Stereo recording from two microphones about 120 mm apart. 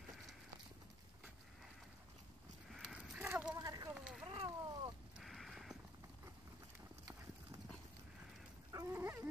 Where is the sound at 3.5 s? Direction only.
30° right (ahead or behind).